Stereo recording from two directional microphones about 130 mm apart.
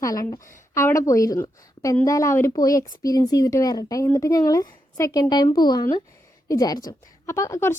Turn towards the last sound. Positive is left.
turn(degrees=20)  # may be behind; listen again after turning